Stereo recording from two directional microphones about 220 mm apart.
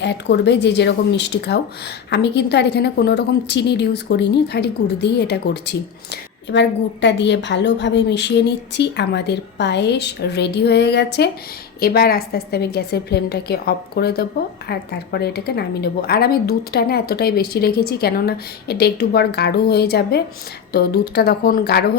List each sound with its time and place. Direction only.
0.0 s a woman's voice: 50° left (ahead or behind)